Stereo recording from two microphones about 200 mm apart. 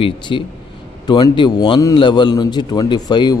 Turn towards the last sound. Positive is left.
turn(degrees=20)  # may be behind; listen again after turning